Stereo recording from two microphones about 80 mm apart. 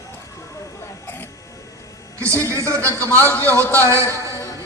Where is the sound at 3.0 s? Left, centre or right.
Right.